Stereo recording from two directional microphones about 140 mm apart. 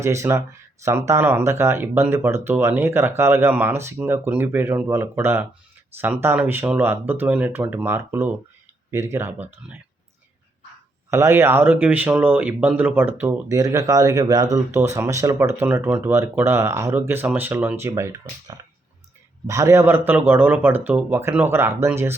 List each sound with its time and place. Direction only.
0.0 s speech: 20° right (ahead or behind)
11.1 s speech: 20° right (ahead or behind)